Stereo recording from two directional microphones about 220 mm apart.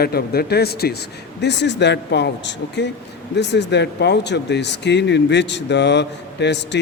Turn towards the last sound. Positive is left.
turn(degrees=50)  # may be behind; listen again after turning